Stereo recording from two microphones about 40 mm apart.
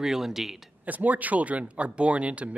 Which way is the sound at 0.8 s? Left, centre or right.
Right.